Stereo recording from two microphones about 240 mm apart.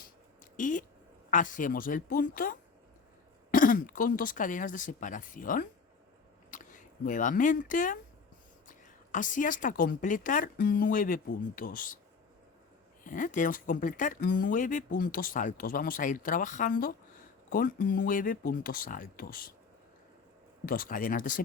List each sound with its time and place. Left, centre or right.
0.5 s speech: left
9.1 s speech: left
13.1 s speech: left
20.7 s speech: left